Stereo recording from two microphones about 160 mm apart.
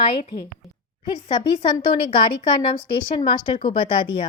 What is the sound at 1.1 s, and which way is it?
A woman's voice, 25° left (ahead or behind).